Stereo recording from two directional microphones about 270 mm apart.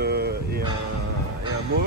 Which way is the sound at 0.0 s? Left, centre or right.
Right.